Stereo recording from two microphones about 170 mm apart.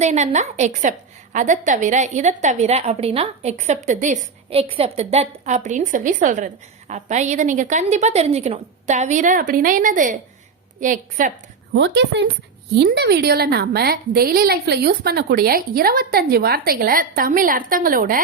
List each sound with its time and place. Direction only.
0.0 s a woman's voice: 45° right (ahead or behind)
11.7 s a woman's voice: 90° right
12.7 s a woman's voice: 75° right (ahead or behind); by 18.2 s 55° right (ahead or behind)